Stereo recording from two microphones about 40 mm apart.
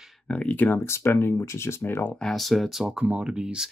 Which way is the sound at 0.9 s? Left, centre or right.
Left.